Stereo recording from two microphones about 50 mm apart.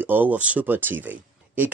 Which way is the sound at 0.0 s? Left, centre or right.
Right.